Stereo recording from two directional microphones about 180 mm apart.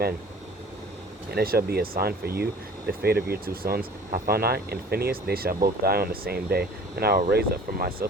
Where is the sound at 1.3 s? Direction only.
55° right (ahead or behind).